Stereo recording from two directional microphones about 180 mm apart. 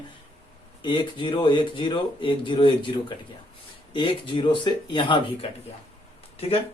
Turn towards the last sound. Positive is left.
turn(degrees=30)  # may be behind; listen again after turning